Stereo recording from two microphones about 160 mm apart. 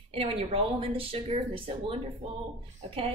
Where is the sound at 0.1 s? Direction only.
35° right (ahead or behind).